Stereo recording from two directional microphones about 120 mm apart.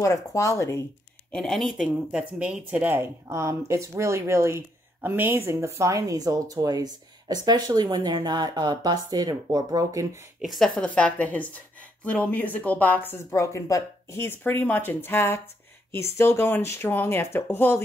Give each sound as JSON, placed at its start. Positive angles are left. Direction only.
{"t": 0.0, "sound": "speech", "side_deg": 25}
{"t": 1.3, "sound": "speech", "side_deg": 5}
{"t": 10.4, "sound": "a woman's voice", "side_deg": 0}